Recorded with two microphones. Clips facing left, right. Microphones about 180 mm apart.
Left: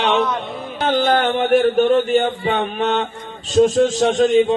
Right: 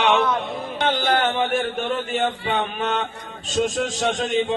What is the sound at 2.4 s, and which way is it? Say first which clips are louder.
Speech: left 5 dB; 40° left (ahead or behind).